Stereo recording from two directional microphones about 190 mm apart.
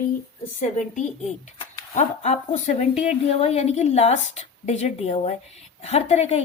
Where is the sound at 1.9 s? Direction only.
35° left (ahead or behind).